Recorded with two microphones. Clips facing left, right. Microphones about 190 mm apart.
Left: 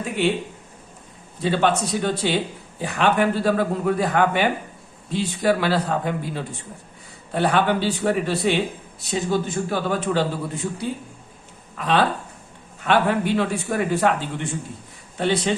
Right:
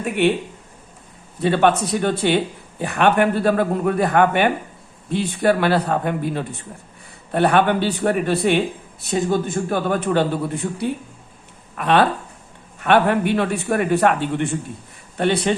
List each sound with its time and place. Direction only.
0.2 s speech: 60° right (ahead or behind)
1.4 s a man's voice: 60° right (ahead or behind)